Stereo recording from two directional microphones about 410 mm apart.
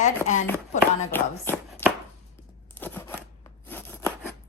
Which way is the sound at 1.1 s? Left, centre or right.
Centre.